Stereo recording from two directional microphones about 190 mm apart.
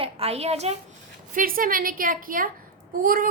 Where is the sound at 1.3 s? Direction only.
45° right (ahead or behind).